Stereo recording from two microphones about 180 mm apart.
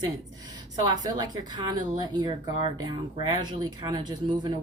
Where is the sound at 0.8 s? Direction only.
25° right (ahead or behind).